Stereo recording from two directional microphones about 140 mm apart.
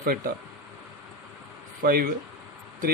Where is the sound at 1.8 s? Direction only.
90° right.